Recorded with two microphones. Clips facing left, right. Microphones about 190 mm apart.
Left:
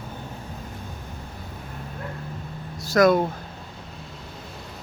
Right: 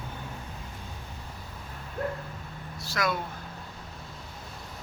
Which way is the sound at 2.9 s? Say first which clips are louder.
Left 13 dB; 45° left (ahead or behind).